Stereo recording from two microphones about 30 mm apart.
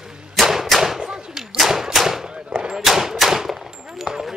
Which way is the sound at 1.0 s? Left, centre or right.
Right.